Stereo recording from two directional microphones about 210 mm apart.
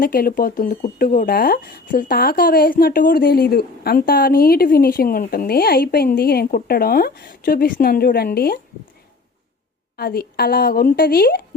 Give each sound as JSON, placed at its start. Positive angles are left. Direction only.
{"t": 0.0, "sound": "speech", "side_deg": 45}
{"t": 10.0, "sound": "speech", "side_deg": 45}